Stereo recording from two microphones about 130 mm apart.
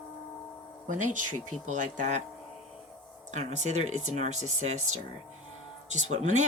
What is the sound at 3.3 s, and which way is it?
Speech, 65° right (ahead or behind).